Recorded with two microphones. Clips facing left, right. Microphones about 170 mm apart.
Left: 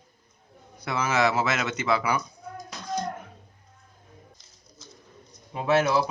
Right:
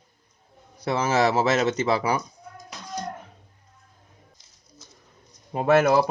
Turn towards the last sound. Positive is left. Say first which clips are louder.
# right 4 dB
turn(degrees=-50)  # may be behind; listen again after turning